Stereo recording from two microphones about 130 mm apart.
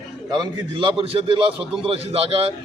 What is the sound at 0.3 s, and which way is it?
A man's voice, 35° right (ahead or behind).